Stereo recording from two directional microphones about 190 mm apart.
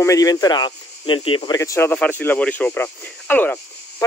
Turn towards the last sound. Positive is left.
turn(degrees=10)  # may be behind; listen again after turning